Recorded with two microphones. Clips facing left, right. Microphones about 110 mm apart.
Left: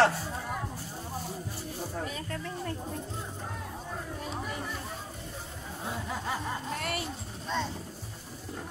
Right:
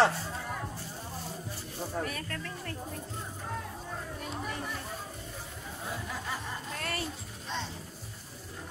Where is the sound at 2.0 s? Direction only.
15° left (ahead or behind).